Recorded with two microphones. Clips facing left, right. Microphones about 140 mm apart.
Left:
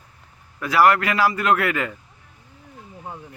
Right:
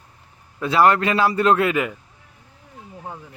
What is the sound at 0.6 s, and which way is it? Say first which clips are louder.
A man's voice: right 1 dB; 25° right (ahead or behind).